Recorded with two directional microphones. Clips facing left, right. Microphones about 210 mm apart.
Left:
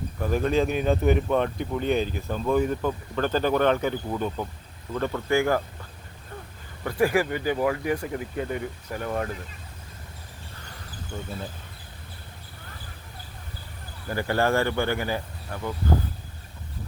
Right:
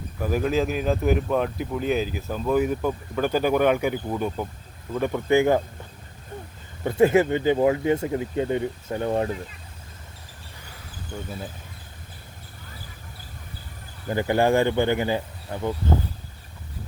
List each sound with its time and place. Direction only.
0.2 s speech: 5° right (ahead or behind)
6.8 s speech: 20° right (ahead or behind)
14.1 s speech: 20° right (ahead or behind)